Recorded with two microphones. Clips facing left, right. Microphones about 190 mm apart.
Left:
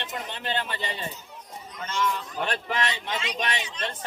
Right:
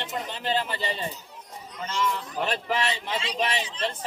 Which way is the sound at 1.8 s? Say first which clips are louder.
Even; 5° right (ahead or behind).